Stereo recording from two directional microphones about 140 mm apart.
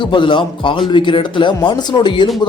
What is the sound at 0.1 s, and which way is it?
Speech, 35° left (ahead or behind).